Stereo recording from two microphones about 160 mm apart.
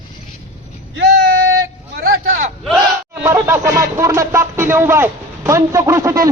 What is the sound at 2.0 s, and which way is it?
Vehicle, 70° right (ahead or behind).